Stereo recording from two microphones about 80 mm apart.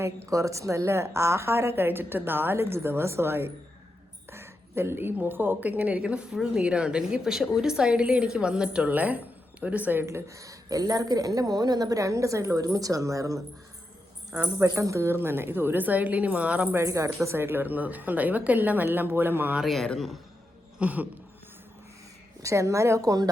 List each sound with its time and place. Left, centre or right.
0.0 s a woman's voice: right
14.6 s a woman's voice: right; by 16.6 s centre
16.7 s a woman's voice: right
19.6 s speech: centre
20.7 s a woman's voice: centre
22.4 s a woman's voice: right